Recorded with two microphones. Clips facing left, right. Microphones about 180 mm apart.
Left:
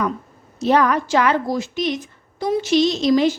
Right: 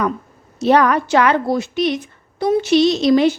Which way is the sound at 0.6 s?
70° right (ahead or behind).